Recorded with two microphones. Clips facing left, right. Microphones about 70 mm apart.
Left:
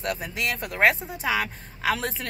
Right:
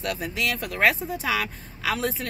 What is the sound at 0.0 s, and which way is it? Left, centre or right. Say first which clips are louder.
Speech: right 1 dB; left.